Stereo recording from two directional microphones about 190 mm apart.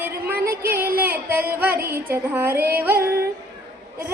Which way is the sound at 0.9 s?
10° right (ahead or behind).